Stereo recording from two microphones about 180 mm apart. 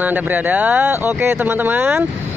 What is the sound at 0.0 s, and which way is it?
Speech, 10° right (ahead or behind).